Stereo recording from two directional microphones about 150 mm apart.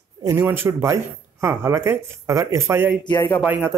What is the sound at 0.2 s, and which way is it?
Speech, 15° right (ahead or behind).